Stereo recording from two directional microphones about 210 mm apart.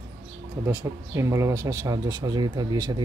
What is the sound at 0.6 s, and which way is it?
A man's voice, 10° right (ahead or behind).